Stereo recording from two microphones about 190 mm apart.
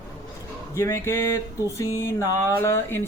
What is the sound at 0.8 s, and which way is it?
Speech, 15° left (ahead or behind).